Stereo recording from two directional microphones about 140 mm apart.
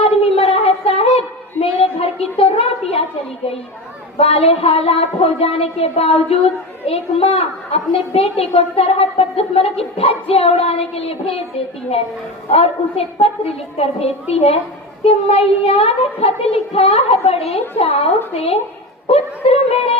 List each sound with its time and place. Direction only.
0.3 s a sound: 45° left (ahead or behind)
4.2 s speech: 45° left (ahead or behind)
12.5 s speech: 45° left (ahead or behind)